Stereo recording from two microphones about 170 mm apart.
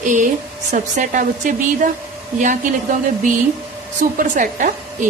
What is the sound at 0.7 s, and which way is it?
A woman's voice, 50° right (ahead or behind).